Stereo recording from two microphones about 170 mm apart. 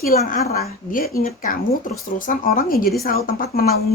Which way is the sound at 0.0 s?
60° left (ahead or behind).